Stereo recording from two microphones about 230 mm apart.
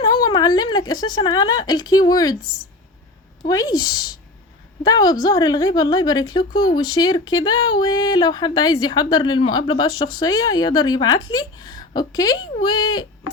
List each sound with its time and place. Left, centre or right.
0.0 s speech: centre
3.4 s speech: centre